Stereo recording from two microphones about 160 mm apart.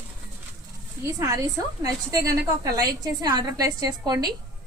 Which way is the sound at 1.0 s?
20° right (ahead or behind).